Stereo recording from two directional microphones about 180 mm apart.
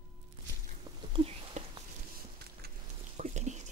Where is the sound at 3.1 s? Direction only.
40° right (ahead or behind).